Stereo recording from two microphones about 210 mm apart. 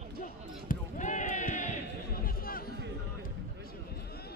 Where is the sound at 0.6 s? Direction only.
35° left (ahead or behind).